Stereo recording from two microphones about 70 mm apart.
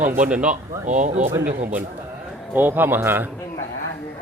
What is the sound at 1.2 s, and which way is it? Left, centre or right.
Speech, right.